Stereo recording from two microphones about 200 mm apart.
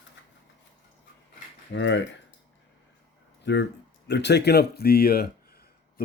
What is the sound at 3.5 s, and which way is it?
Speech, 60° left (ahead or behind).